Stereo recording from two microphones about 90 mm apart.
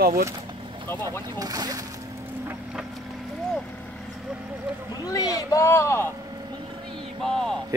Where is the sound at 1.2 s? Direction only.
45° right (ahead or behind).